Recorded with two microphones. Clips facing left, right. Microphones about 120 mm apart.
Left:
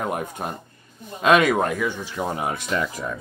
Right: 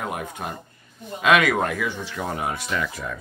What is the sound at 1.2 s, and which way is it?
Speech, 30° left (ahead or behind).